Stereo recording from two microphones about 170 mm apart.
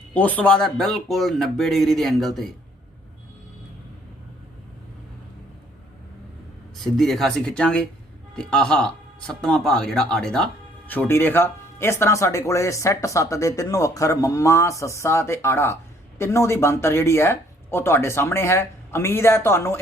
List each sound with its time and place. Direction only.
0.1 s speech: 10° left (ahead or behind)
6.7 s speech: centre (ahead or behind)